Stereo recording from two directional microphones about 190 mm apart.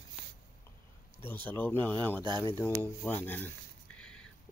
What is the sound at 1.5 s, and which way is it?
Speech, 10° left (ahead or behind).